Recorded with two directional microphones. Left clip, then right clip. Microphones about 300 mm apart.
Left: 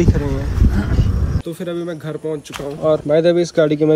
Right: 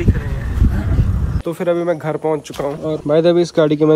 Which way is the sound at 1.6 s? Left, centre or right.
Right.